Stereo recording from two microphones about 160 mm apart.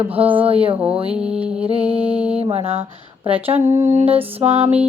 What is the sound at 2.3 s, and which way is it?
Mantra, 40° right (ahead or behind).